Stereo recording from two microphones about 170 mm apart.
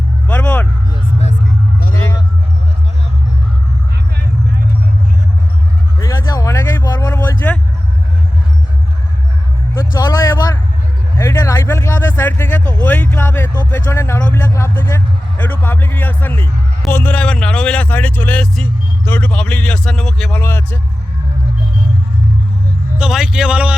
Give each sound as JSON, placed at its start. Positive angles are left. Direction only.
{"t": 0.3, "sound": "vehicle", "side_deg": 10}
{"t": 1.9, "sound": "music", "side_deg": 15}
{"t": 6.0, "sound": "a sound", "side_deg": 20}
{"t": 10.0, "sound": "vehicle", "side_deg": 20}
{"t": 11.2, "sound": "a sound", "side_deg": 20}
{"t": 13.7, "sound": "a man's voice", "side_deg": 15}
{"t": 23.0, "sound": "a man's voice", "side_deg": -5}